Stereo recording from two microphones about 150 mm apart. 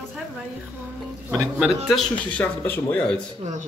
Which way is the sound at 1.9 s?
5° left (ahead or behind).